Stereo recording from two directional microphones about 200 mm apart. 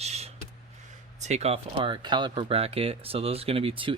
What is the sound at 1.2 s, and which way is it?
Speech, 35° right (ahead or behind).